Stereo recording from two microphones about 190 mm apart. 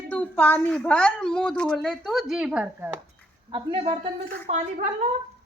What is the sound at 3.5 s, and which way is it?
A woman's voice, 25° right (ahead or behind).